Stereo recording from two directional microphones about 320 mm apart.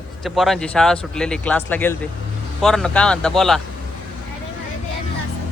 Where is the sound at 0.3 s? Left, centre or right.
Centre.